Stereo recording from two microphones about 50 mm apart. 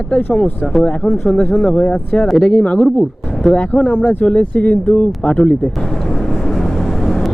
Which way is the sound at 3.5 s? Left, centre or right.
Left.